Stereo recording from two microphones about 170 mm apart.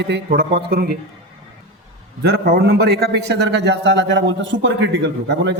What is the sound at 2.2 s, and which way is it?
A man's voice, 70° right (ahead or behind).